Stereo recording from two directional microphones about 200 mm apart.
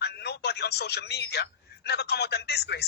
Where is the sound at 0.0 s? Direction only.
55° left (ahead or behind).